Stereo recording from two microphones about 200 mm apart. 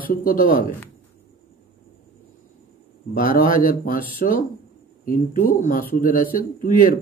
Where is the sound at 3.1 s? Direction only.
45° left (ahead or behind).